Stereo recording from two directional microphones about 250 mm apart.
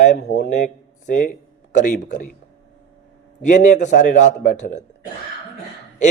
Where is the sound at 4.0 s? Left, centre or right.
Left.